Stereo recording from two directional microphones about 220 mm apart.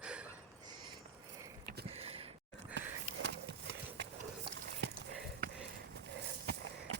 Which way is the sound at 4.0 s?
55° right (ahead or behind).